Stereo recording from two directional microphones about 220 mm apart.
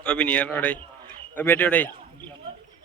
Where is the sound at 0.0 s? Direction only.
5° left (ahead or behind).